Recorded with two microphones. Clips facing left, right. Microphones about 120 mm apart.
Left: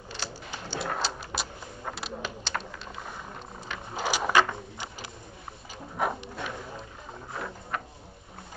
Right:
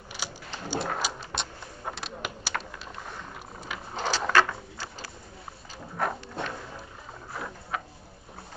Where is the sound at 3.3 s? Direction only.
5° right (ahead or behind).